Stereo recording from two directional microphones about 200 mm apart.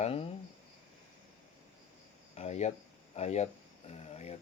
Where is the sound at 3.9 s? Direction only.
30° left (ahead or behind).